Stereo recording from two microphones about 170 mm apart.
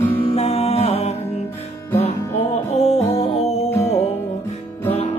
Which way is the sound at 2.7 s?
35° left (ahead or behind).